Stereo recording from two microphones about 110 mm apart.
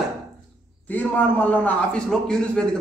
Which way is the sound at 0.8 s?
15° left (ahead or behind).